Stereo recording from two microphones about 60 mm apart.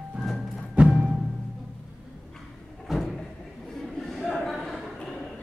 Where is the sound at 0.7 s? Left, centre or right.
Centre.